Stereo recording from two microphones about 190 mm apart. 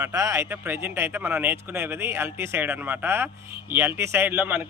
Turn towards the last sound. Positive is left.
turn(degrees=-10)  # may be behind; listen again after turning